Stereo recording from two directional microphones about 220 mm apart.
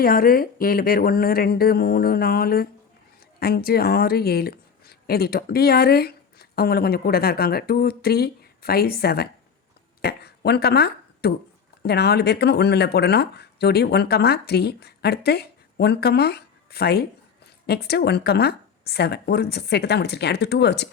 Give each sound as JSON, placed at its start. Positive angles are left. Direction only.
{"t": 0.0, "sound": "speech", "side_deg": 40}